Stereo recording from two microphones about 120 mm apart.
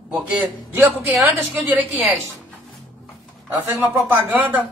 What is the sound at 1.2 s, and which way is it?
Speech, 15° right (ahead or behind).